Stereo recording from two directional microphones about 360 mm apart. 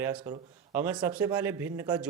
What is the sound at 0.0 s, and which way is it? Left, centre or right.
Speech, centre.